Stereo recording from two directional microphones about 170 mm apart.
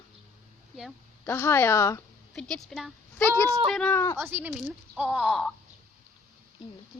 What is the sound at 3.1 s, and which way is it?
Speech, 15° left (ahead or behind).